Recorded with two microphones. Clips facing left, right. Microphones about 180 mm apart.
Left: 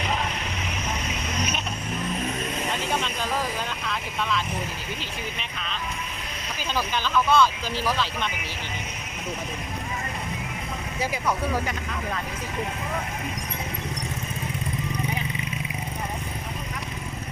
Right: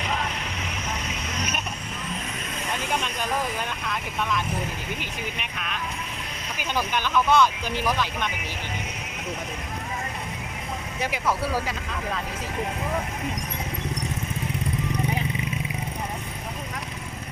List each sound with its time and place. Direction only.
4.2 s speech: 15° right (ahead or behind)
6.6 s speech: 15° right (ahead or behind)
11.0 s speech: 5° right (ahead or behind)